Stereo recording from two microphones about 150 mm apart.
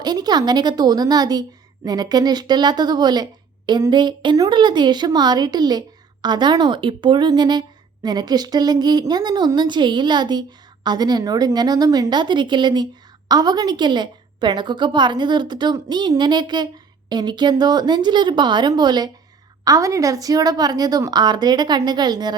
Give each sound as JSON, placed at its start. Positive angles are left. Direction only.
{"t": 0.0, "sound": "a woman's voice", "side_deg": -25}